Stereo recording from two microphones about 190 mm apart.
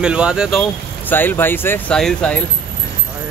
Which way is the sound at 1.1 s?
10° left (ahead or behind).